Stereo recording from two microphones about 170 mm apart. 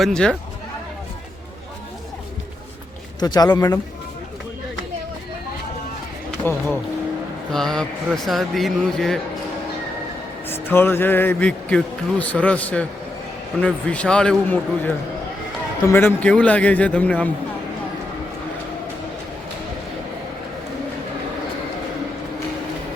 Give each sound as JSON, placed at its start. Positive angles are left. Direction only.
{"t": 0.0, "sound": "a man's voice", "side_deg": 5}
{"t": 3.2, "sound": "speech", "side_deg": 25}
{"t": 6.4, "sound": "a man's voice", "side_deg": 10}
{"t": 10.5, "sound": "a man's voice", "side_deg": 15}